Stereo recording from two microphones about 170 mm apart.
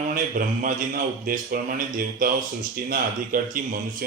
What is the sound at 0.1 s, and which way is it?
A man's voice, 55° right (ahead or behind).